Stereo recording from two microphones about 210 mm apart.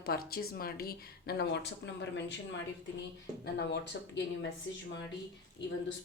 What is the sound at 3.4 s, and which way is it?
Speech, 55° left (ahead or behind).